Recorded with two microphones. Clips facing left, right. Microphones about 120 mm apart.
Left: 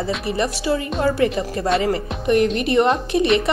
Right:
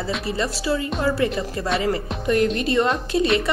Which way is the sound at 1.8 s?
20° left (ahead or behind).